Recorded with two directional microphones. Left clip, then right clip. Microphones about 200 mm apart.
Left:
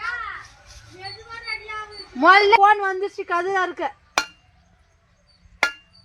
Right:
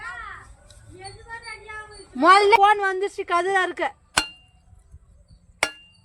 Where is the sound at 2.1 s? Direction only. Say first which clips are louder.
Left 1 dB; 20° right (ahead or behind).